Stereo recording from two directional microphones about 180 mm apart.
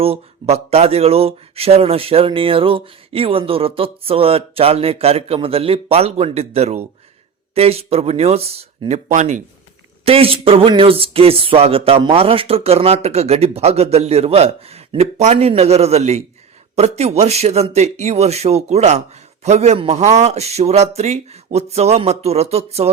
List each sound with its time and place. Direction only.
0.0 s speech: 35° right (ahead or behind)